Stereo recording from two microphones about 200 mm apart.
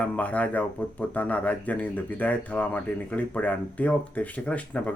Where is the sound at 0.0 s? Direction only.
5° left (ahead or behind).